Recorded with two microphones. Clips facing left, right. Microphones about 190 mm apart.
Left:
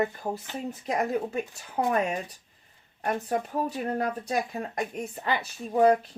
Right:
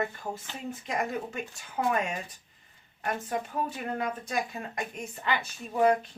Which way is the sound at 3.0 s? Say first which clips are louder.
Left 4 dB; 40° left (ahead or behind).